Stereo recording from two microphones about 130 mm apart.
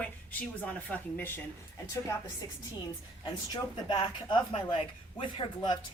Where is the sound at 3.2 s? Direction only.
35° left (ahead or behind).